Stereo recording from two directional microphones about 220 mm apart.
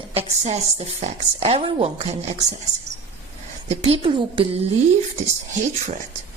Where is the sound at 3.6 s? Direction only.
25° right (ahead or behind).